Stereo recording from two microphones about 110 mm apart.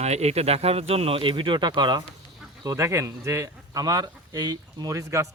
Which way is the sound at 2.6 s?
30° right (ahead or behind).